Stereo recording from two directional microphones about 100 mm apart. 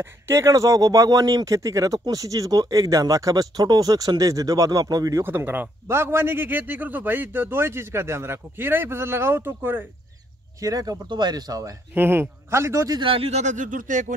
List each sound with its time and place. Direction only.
0.0 s speech: 25° right (ahead or behind)
5.2 s a man's voice: 20° right (ahead or behind)
10.6 s speech: 40° right (ahead or behind)
11.9 s a man's voice: 20° right (ahead or behind)
12.9 s speech: 60° right (ahead or behind)